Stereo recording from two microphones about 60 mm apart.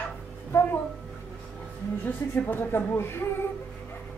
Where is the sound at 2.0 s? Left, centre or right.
Left.